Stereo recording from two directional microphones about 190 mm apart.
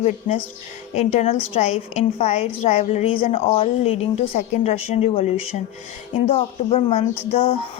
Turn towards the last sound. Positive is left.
turn(degrees=30)  # may be behind; listen again after turning